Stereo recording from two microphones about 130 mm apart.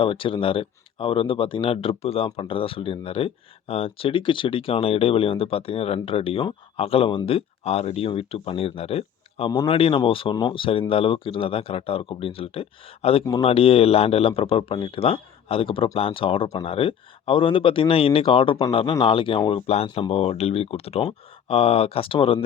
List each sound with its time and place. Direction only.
0.0 s speech: 45° left (ahead or behind)